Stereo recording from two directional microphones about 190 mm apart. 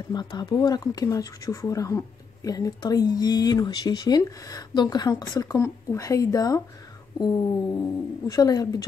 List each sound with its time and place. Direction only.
0.1 s speech: 20° left (ahead or behind)